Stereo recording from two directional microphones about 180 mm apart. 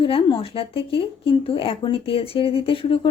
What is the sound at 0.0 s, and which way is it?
Speech, 30° left (ahead or behind).